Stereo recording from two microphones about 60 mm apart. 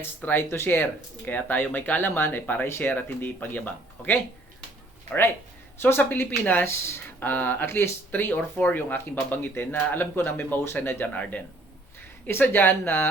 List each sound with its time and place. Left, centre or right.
0.2 s speech: left
2.6 s speech: left
2.9 s speech: left
5.8 s speech: left
11.1 s speech: left